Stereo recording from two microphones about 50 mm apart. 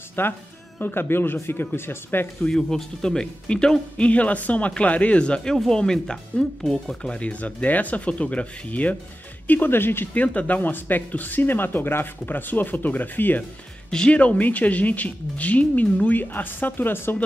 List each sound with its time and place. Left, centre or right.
0.2 s speech: left
2.5 s speech: centre
4.0 s speech: left
9.5 s speech: left
10.1 s speech: left
13.8 s speech: centre
14.1 s speech: left